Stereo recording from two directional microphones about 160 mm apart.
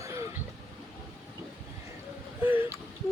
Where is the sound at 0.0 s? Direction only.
20° right (ahead or behind).